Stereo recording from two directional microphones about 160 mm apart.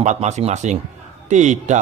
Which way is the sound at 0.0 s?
45° right (ahead or behind).